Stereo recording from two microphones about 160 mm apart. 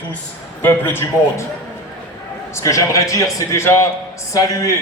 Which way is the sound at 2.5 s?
20° left (ahead or behind).